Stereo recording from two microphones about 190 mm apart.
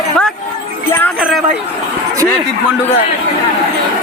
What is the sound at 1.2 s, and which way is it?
Speech, centre (ahead or behind).